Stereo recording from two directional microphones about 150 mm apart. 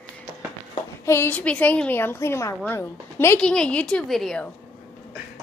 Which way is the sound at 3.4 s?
5° left (ahead or behind).